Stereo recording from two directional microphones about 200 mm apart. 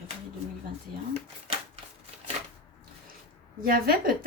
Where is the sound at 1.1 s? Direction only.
30° right (ahead or behind).